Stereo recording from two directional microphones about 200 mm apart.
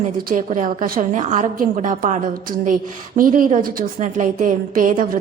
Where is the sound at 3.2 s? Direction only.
40° right (ahead or behind).